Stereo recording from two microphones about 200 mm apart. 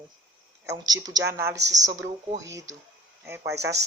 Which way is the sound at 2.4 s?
15° right (ahead or behind).